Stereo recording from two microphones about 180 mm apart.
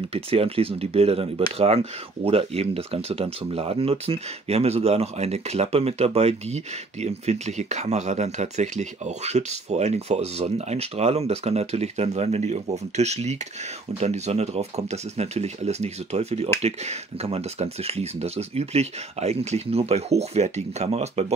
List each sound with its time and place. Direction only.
0.1 s speech: 35° right (ahead or behind)